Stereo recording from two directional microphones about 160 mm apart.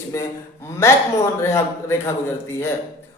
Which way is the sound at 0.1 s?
20° left (ahead or behind).